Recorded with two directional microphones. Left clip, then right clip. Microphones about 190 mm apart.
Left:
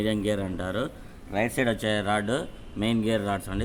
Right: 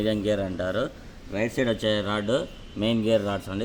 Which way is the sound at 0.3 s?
20° left (ahead or behind).